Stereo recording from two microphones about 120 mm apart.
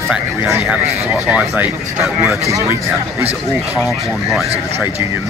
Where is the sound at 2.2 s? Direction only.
25° right (ahead or behind).